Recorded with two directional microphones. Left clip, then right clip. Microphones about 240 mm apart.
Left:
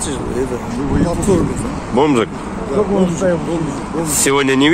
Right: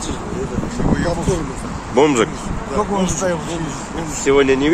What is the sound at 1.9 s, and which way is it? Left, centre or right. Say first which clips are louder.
Speech: even; centre.